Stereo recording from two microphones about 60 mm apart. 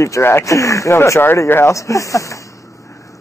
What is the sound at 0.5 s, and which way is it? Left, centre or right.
Speech, left.